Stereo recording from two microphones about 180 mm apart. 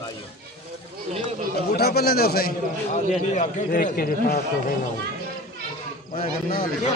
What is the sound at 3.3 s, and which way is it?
A man's voice, 45° left (ahead or behind).